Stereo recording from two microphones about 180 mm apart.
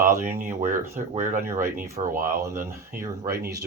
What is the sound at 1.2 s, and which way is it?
Speech, 45° right (ahead or behind).